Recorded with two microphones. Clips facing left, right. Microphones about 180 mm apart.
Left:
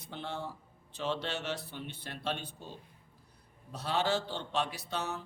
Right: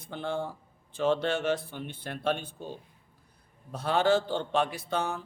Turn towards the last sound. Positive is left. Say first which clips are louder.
# right 6 dB
turn(degrees=-50)  # may be behind; listen again after turning